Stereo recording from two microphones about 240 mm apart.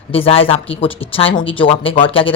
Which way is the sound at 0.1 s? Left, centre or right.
Left.